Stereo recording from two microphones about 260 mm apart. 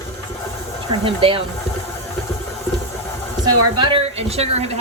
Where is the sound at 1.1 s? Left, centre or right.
Right.